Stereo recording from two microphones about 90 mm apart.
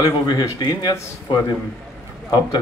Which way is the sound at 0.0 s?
50° left (ahead or behind).